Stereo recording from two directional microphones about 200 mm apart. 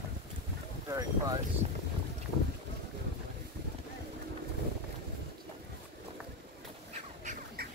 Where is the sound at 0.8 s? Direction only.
20° right (ahead or behind).